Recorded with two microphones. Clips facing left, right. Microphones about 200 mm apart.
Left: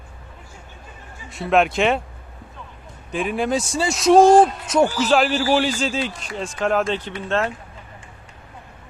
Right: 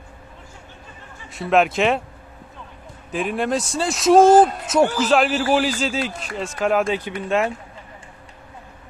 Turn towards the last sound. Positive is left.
turn(degrees=-10)  # may be behind; listen again after turning